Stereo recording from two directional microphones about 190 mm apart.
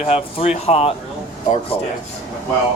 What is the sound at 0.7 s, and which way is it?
Speech, 30° left (ahead or behind).